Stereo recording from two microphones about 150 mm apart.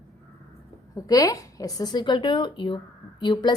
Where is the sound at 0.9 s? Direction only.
25° left (ahead or behind).